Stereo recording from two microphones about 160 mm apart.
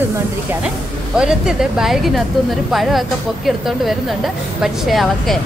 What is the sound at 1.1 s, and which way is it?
A woman's voice, 5° right (ahead or behind).